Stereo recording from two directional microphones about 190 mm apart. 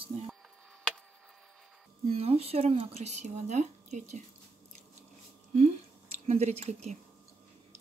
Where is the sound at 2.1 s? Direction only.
30° right (ahead or behind).